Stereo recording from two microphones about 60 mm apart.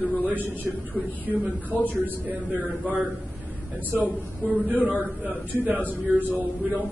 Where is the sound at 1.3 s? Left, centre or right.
Right.